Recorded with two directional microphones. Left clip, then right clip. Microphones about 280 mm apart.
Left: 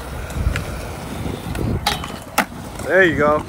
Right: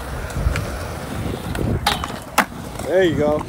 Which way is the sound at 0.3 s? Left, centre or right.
Centre.